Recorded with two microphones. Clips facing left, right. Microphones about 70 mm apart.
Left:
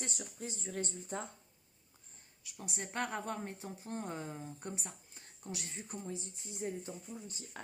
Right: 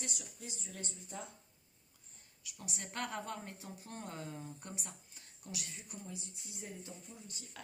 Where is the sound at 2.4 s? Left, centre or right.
Left.